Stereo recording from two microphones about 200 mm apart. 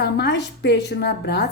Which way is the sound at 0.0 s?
55° left (ahead or behind).